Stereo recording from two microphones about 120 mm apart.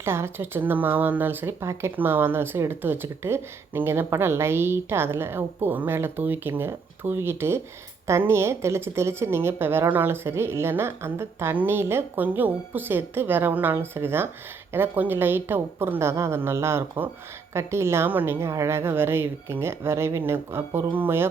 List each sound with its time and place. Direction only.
0.0 s speech: 20° right (ahead or behind)